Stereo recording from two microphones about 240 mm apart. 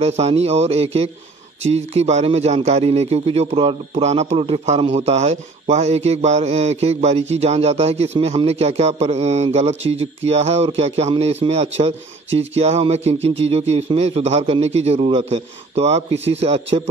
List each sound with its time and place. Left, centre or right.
0.0 s a man's voice: right